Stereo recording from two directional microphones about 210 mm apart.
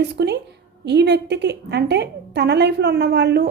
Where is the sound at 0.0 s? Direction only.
50° right (ahead or behind).